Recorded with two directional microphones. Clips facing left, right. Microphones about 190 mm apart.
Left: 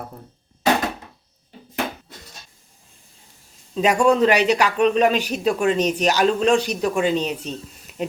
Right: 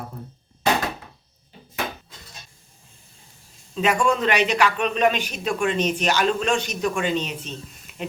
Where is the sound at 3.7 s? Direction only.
40° left (ahead or behind).